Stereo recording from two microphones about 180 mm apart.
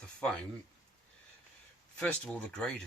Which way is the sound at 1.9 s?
5° left (ahead or behind).